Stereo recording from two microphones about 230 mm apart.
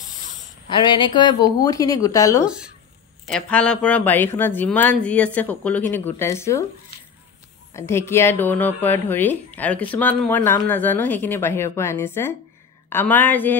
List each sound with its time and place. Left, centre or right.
0.7 s speech: left
2.4 s speech: centre
7.7 s speech: centre